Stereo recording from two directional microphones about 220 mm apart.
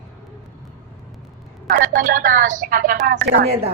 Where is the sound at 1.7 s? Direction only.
40° right (ahead or behind).